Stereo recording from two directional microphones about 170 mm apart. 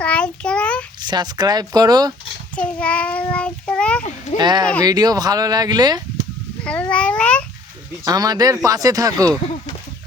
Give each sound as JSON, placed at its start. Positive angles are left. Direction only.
{"t": 0.0, "sound": "a sound", "side_deg": 5}
{"t": 1.0, "sound": "speech", "side_deg": -25}
{"t": 2.6, "sound": "a child's voice", "side_deg": 10}
{"t": 4.4, "sound": "speech", "side_deg": -25}
{"t": 6.7, "sound": "speech", "side_deg": 5}
{"t": 8.0, "sound": "speech", "side_deg": -20}